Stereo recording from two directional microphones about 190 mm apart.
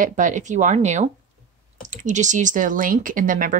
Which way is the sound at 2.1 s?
40° right (ahead or behind).